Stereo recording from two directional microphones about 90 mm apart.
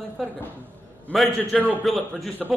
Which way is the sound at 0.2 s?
Centre (ahead or behind).